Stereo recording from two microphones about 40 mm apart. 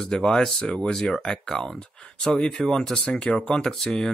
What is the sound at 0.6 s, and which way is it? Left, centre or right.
Speech, left.